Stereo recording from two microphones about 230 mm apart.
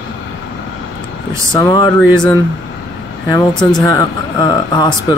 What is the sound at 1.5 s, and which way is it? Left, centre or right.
Speech, centre.